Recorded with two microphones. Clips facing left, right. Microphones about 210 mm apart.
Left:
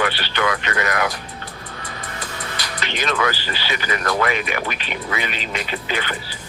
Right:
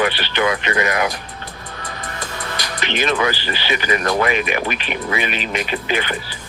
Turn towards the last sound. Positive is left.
turn(degrees=-15)  # may be behind; listen again after turning